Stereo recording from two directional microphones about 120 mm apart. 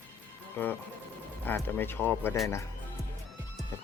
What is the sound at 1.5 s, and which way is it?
Speech, 15° left (ahead or behind).